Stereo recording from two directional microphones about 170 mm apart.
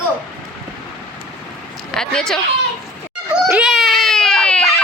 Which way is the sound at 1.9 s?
5° left (ahead or behind).